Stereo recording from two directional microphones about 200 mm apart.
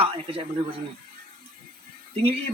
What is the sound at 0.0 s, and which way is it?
Speech, 25° right (ahead or behind).